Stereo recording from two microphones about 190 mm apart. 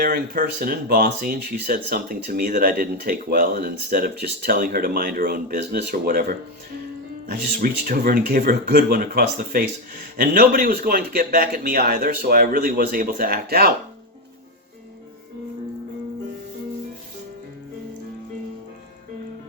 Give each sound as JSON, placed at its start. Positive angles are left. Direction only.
{"t": 0.0, "sound": "speech", "side_deg": -50}